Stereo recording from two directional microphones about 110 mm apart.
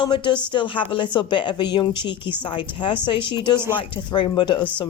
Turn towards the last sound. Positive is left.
turn(degrees=45)  # may be behind; listen again after turning